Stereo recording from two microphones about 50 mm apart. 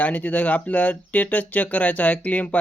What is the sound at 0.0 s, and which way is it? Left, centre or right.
Speech, left.